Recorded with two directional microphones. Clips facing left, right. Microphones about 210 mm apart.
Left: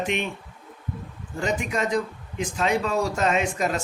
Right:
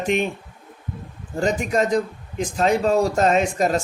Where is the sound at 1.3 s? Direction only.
40° right (ahead or behind).